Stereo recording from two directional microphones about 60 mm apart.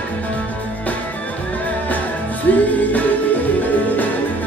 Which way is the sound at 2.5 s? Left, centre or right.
Left.